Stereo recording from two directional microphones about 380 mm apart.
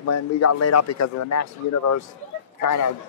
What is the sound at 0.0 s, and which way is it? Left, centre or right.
Speech, left.